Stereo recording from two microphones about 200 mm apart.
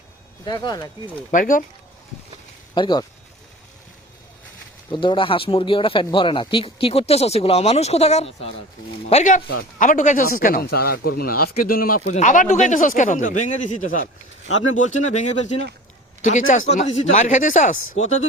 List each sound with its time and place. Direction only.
0.4 s speech: 20° left (ahead or behind)
1.3 s a man's voice: 40° left (ahead or behind)
2.7 s speech: 20° left (ahead or behind)
4.9 s a man's voice: 25° left (ahead or behind)